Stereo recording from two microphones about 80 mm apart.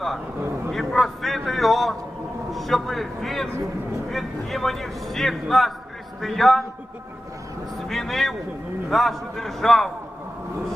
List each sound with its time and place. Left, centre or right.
0.7 s speech: centre
2.5 s a sound: centre
4.1 s a man's voice: centre
7.9 s speech: centre